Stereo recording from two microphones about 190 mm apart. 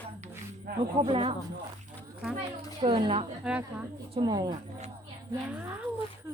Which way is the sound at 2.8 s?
25° right (ahead or behind).